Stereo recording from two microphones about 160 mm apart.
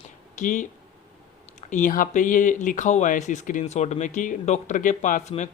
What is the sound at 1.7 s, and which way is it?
Speech, 55° left (ahead or behind).